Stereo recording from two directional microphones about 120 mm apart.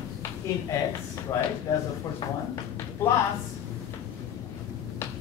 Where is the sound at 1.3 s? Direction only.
20° left (ahead or behind).